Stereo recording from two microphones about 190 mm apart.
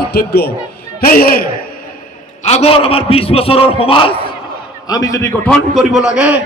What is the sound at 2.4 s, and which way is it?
A man's voice, 35° left (ahead or behind).